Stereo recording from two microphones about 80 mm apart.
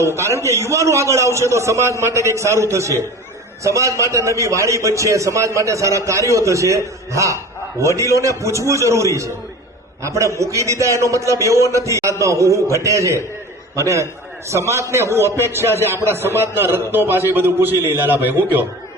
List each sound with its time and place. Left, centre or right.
0.0 s a man's voice: right